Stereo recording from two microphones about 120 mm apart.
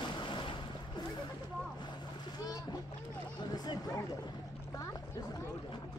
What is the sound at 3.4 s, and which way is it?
Speech, 35° left (ahead or behind).